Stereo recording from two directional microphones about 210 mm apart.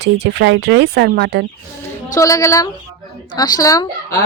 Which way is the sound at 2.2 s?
15° left (ahead or behind).